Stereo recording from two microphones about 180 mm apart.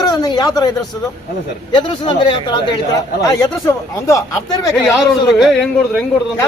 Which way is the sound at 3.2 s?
15° left (ahead or behind).